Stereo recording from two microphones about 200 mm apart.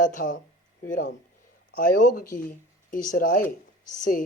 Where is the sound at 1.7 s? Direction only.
45° left (ahead or behind).